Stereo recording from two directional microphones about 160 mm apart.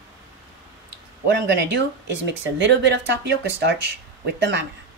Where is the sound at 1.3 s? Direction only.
90° right.